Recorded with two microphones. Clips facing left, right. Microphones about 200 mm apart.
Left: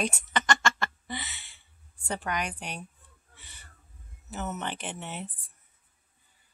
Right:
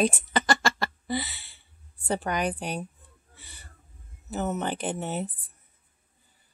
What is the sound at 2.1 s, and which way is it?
Speech, 35° right (ahead or behind).